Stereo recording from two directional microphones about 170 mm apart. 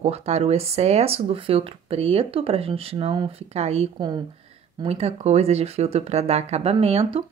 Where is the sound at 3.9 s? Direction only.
25° right (ahead or behind).